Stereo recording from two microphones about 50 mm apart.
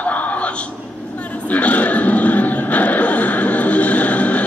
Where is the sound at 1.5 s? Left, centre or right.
Left.